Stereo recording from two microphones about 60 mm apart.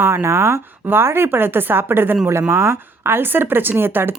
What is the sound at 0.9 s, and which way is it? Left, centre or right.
Speech, right.